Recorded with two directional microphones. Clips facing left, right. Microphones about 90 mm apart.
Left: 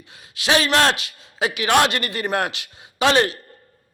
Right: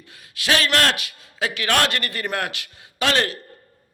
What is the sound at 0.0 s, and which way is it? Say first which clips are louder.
A man's voice: left 2 dB; 20° left (ahead or behind).